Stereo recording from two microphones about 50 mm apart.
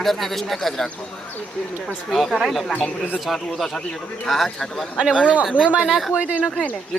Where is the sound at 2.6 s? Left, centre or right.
Left.